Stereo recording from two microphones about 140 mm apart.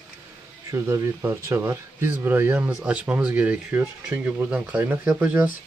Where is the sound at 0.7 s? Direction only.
20° right (ahead or behind).